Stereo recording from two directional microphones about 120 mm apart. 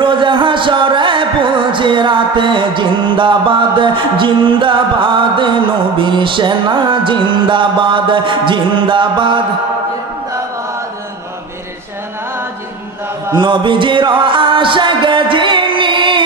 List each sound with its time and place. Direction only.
0.0 s music: 45° right (ahead or behind)
13.4 s music: 40° right (ahead or behind)